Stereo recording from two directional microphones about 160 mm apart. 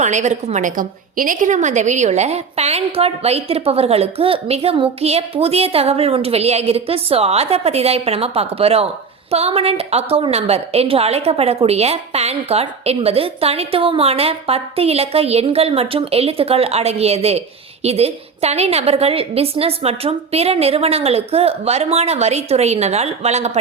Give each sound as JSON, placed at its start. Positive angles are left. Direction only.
{"t": 0.0, "sound": "a woman's voice", "side_deg": -45}